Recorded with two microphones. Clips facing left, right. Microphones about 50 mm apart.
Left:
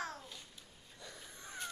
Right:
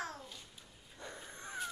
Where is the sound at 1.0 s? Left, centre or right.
Right.